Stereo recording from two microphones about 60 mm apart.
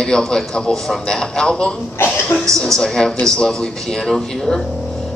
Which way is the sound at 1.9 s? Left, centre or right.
Left.